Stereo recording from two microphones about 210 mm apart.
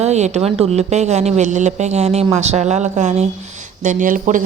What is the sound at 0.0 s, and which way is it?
A woman's voice, 30° right (ahead or behind).